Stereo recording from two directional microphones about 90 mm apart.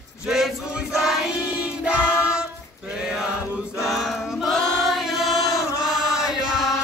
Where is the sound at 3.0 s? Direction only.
5° right (ahead or behind).